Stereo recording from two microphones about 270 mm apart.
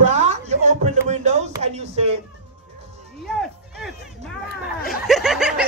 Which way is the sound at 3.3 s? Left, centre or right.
Centre.